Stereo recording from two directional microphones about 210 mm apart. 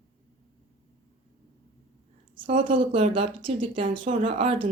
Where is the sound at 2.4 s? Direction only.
25° right (ahead or behind).